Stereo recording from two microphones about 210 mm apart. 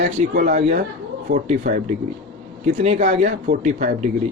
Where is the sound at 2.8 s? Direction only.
35° right (ahead or behind).